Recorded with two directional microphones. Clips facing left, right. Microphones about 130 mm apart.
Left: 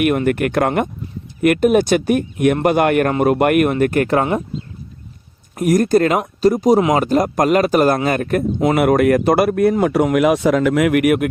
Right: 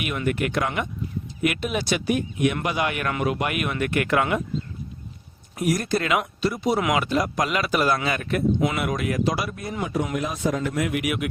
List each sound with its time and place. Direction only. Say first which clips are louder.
0.0 s a man's voice: left 9 dB; 55° left (ahead or behind); by 4.4 s 35° left (ahead or behind)
5.5 s a man's voice: left 10 dB; 45° left (ahead or behind)
8.8 s speech: left 11 dB; 60° left (ahead or behind)